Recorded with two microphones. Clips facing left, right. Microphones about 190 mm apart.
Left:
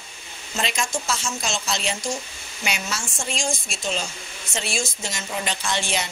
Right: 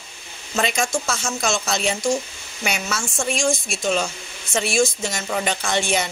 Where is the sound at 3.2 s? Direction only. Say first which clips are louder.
Right 7 dB; 50° right (ahead or behind).